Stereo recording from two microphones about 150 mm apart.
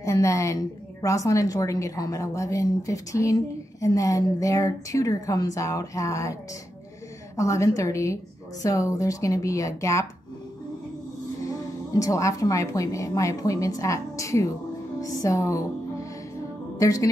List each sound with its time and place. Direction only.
0.0 s a woman's voice: 20° left (ahead or behind)
7.3 s a woman's voice: 20° left (ahead or behind)
11.4 s a woman's voice: 25° left (ahead or behind)